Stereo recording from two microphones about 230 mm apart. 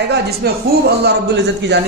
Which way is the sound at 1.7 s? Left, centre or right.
Right.